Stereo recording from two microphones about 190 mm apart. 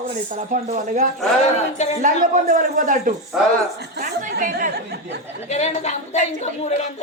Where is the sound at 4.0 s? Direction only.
50° right (ahead or behind).